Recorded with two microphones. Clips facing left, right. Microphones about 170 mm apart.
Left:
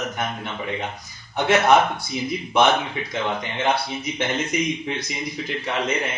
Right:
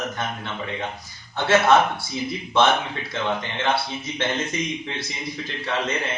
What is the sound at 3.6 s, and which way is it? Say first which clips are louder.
Speech: left 3 dB; 15° left (ahead or behind).